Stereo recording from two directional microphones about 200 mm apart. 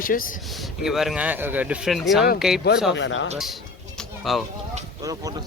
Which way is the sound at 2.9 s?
65° left (ahead or behind).